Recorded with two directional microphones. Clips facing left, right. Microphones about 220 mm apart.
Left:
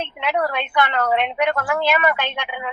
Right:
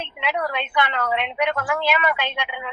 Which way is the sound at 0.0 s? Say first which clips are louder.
Left 4 dB; 45° left (ahead or behind).